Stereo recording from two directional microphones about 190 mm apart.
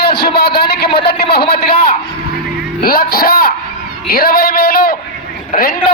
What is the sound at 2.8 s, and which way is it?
A man's voice, 50° left (ahead or behind).